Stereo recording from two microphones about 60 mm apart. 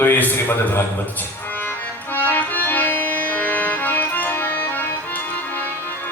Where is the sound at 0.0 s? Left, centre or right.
Left.